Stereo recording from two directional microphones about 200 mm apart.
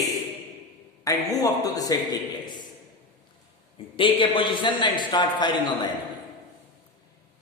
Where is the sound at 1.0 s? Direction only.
15° left (ahead or behind).